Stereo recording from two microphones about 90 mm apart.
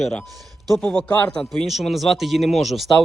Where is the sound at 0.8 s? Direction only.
15° left (ahead or behind).